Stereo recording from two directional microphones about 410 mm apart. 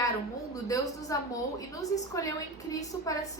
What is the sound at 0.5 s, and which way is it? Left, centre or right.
A woman's voice, centre.